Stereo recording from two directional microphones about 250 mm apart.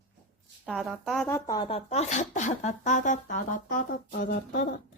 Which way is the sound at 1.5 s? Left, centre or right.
Centre.